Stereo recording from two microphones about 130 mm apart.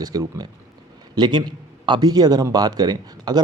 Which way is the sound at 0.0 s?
30° right (ahead or behind).